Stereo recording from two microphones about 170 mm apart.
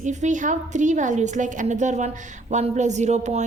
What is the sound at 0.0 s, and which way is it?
Speech, 45° right (ahead or behind).